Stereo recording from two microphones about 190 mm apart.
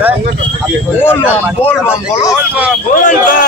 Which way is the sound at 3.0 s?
45° left (ahead or behind).